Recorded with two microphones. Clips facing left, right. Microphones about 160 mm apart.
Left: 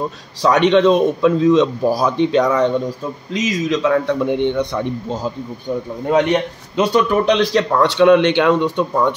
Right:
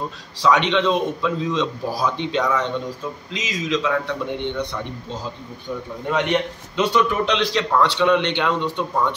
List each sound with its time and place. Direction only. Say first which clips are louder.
0.4 s a man's voice: left 6 dB; 50° left (ahead or behind)
6.8 s a man's voice: left 4 dB; 40° left (ahead or behind)